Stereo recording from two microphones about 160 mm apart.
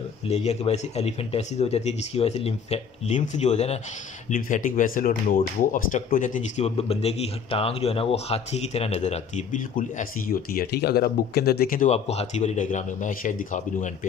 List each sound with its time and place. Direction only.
0.3 s speech: 40° left (ahead or behind)
4.3 s speech: 55° left (ahead or behind)
11.9 s speech: 40° left (ahead or behind)